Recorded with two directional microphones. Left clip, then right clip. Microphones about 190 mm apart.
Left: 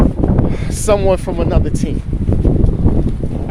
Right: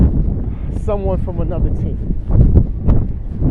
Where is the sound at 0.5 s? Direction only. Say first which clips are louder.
Left 5 dB; 70° left (ahead or behind).